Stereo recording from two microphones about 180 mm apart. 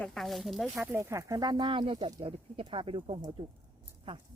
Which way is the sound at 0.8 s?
15° right (ahead or behind).